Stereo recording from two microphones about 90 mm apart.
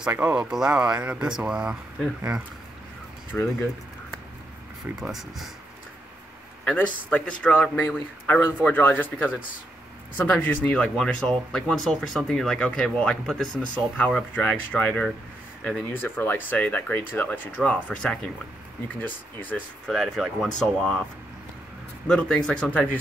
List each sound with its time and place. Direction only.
0.1 s speech: 15° right (ahead or behind)
3.3 s speech: 15° left (ahead or behind)
5.0 s speech: centre (ahead or behind)
6.6 s speech: 10° left (ahead or behind)
8.3 s speech: 25° left (ahead or behind)
19.9 s speech: centre (ahead or behind)
22.0 s speech: 10° left (ahead or behind)